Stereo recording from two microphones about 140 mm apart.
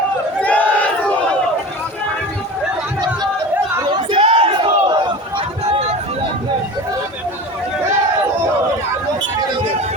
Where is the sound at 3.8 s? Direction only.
35° right (ahead or behind).